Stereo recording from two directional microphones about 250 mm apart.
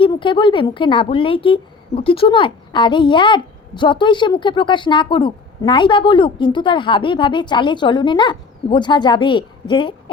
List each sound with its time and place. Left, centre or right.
0.0 s a woman's voice: centre